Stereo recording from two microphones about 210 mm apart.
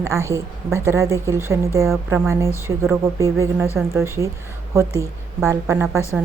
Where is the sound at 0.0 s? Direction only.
15° right (ahead or behind).